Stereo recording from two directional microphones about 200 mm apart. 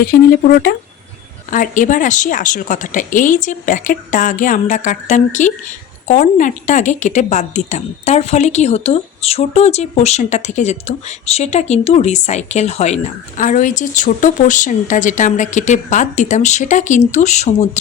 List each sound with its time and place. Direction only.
0.0 s a woman's voice: 50° left (ahead or behind)